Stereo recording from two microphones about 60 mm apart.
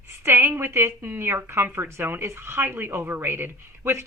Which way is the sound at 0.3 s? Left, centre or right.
Right.